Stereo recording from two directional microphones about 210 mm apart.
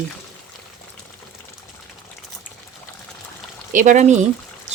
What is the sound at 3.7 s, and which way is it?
Speech, 40° right (ahead or behind).